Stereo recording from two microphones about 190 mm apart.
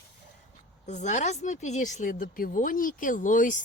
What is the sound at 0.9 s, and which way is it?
Speech, 40° left (ahead or behind).